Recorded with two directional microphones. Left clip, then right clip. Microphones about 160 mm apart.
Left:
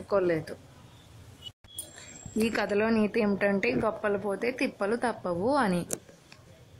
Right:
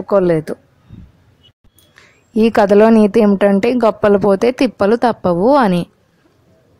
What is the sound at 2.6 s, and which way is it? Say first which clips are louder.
Speech: right 19 dB; 60° right (ahead or behind).